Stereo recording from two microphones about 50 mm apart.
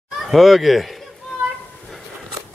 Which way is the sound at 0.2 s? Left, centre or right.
Centre.